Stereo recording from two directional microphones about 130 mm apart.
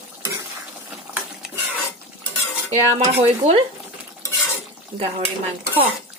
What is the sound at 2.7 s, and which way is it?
Speech, 55° right (ahead or behind).